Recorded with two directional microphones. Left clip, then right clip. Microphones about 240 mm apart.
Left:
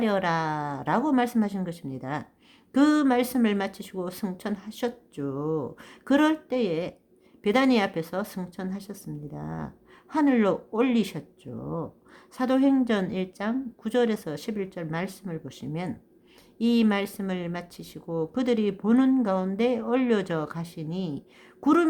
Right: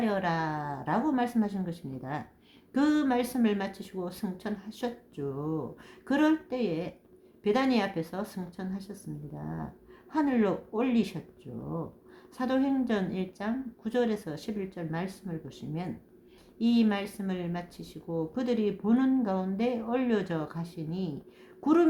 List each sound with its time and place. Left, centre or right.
0.0 s speech: left